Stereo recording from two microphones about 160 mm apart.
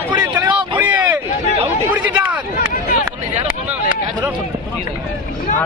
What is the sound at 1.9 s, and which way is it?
Speech, 10° right (ahead or behind).